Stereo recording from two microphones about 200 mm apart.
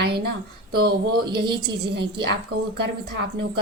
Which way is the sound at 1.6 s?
55° right (ahead or behind).